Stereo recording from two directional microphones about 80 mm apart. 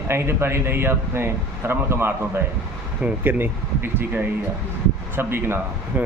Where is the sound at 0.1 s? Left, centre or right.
Right.